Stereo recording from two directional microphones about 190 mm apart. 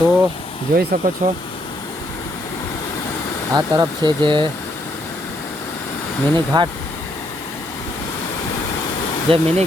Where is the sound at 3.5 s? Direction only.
20° right (ahead or behind).